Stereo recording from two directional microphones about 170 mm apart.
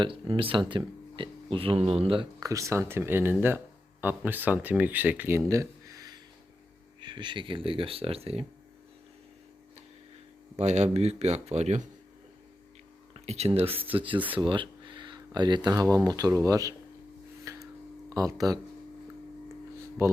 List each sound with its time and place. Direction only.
0.0 s speech: 30° right (ahead or behind)
2.4 s speech: 20° right (ahead or behind); by 8.4 s 35° right (ahead or behind)
10.6 s speech: 40° right (ahead or behind)
13.1 s speech: 40° right (ahead or behind); by 16.7 s 20° right (ahead or behind)
17.4 s a sound: 20° right (ahead or behind)
18.1 s speech: 20° right (ahead or behind)